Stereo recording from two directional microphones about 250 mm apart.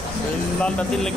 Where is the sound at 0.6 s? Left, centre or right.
Centre.